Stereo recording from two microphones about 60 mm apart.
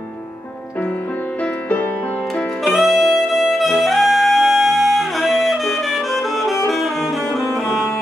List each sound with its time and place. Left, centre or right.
1.4 s music: left
2.6 s music: centre